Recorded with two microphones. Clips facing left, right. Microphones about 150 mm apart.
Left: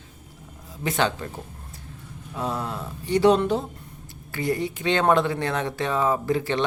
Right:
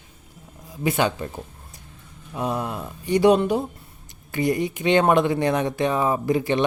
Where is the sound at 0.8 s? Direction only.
10° right (ahead or behind).